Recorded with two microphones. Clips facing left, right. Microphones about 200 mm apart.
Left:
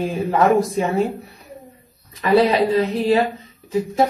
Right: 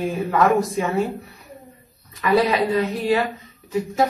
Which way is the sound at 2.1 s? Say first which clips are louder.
Left 3 dB; 30° left (ahead or behind).